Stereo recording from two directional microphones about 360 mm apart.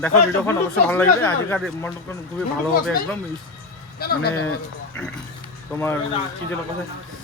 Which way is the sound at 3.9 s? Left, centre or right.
Left.